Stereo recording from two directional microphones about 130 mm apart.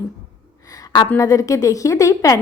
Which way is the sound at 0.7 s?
30° left (ahead or behind).